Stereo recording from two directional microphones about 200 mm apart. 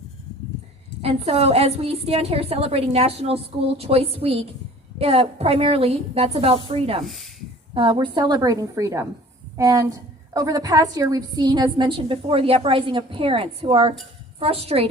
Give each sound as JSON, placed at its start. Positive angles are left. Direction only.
{"t": 1.0, "sound": "a woman's voice", "side_deg": -30}
{"t": 7.0, "sound": "speech", "side_deg": 0}
{"t": 7.7, "sound": "a woman's voice", "side_deg": -25}